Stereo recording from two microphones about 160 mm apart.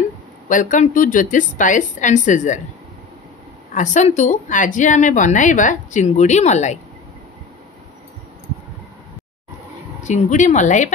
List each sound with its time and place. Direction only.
0.5 s a woman's voice: 55° left (ahead or behind)
3.7 s a woman's voice: 50° left (ahead or behind)
10.0 s a woman's voice: 50° left (ahead or behind)